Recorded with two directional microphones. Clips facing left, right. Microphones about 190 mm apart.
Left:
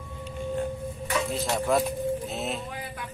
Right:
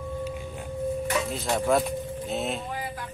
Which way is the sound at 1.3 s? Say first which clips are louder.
Right 1 dB; centre (ahead or behind).